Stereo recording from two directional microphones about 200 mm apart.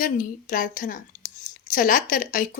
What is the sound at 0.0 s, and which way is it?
A woman's voice, 45° left (ahead or behind).